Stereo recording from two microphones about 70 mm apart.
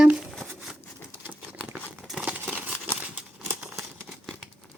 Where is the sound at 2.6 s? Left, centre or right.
Right.